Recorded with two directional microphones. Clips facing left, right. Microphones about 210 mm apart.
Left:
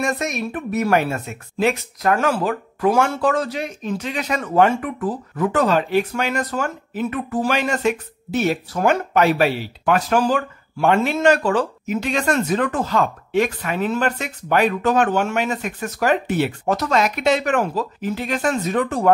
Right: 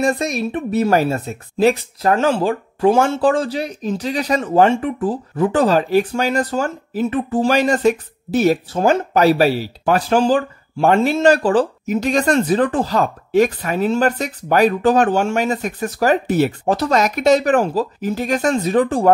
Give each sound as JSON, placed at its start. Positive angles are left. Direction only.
{"t": 0.0, "sound": "speech", "side_deg": -35}
{"t": 8.7, "sound": "speech", "side_deg": -30}